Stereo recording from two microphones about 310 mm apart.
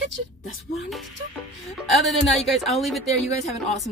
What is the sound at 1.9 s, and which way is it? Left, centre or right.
Speech, centre.